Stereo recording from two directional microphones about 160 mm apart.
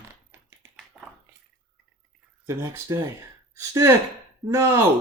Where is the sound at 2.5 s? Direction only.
15° right (ahead or behind).